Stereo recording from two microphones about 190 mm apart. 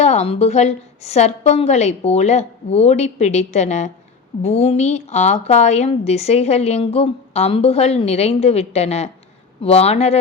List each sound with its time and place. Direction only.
0.0 s a woman's voice: 35° left (ahead or behind)